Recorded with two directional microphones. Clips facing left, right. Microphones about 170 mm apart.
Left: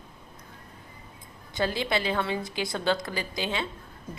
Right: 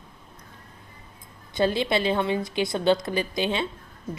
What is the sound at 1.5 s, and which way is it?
Speech, 20° right (ahead or behind).